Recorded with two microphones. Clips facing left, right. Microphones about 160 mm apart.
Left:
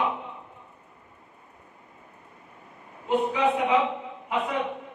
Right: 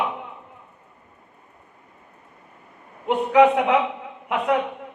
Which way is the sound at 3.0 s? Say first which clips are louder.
Right 7 dB; 70° right (ahead or behind).